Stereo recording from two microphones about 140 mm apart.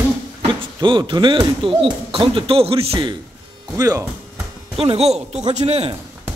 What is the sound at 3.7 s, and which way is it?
Speech, 25° right (ahead or behind).